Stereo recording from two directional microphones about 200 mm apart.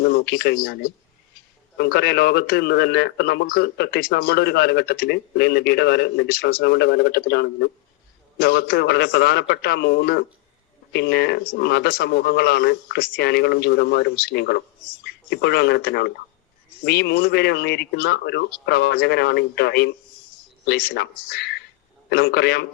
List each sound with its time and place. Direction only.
0.0 s a man's voice: 50° left (ahead or behind)